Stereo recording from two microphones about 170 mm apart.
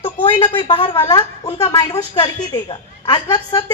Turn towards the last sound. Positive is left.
turn(degrees=25)  # may be behind; listen again after turning